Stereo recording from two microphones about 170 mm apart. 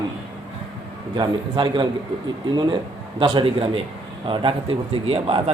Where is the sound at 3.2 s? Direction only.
30° right (ahead or behind).